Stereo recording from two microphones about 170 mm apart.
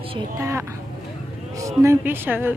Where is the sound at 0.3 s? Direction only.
15° right (ahead or behind).